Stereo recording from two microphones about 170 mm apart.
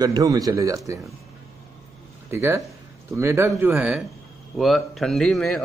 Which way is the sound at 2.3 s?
15° right (ahead or behind).